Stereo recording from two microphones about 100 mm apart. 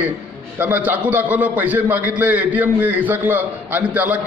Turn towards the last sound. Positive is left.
turn(degrees=-15)  # may be behind; listen again after turning